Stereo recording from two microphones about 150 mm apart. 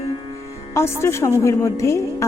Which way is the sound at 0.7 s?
15° left (ahead or behind).